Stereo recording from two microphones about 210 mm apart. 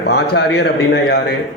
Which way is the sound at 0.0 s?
50° left (ahead or behind).